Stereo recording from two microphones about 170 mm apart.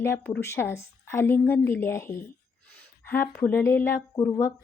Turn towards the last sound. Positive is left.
turn(degrees=15)  # may be behind; listen again after turning